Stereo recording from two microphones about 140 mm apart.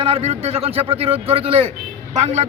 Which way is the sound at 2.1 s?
55° right (ahead or behind).